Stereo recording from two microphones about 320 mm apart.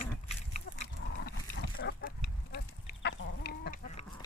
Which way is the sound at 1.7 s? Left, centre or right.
Left.